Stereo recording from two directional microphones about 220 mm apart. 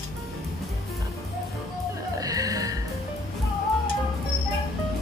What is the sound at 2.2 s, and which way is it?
Music, 15° right (ahead or behind).